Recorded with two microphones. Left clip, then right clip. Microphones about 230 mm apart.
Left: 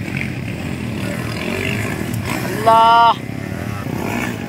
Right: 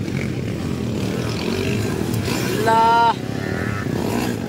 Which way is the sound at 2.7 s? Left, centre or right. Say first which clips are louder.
Left 5 dB; centre.